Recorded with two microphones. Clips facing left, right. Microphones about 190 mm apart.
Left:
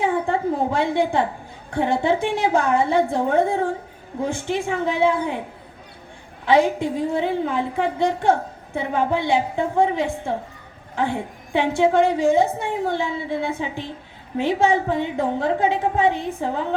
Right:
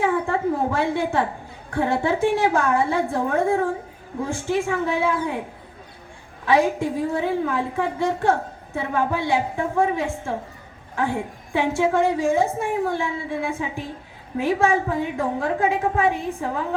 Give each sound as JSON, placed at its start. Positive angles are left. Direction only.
{"t": 0.0, "sound": "a woman's voice", "side_deg": 20}
{"t": 6.4, "sound": "a woman's voice", "side_deg": 20}